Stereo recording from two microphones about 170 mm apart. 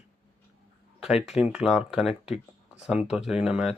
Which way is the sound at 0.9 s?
5° right (ahead or behind).